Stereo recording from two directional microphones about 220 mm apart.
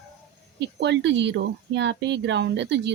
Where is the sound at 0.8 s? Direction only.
55° right (ahead or behind).